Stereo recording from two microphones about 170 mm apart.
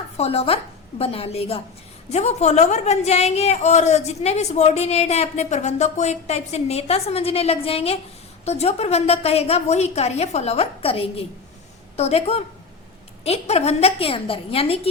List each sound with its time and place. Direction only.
0.2 s a woman's voice: 35° left (ahead or behind)